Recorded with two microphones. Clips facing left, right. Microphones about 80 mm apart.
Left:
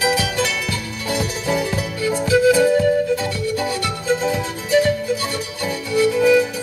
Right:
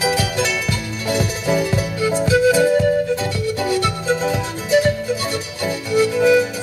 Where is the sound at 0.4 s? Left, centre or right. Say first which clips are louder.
Right 1 dB; right.